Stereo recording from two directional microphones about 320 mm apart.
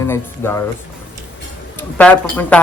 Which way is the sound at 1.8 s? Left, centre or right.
Centre.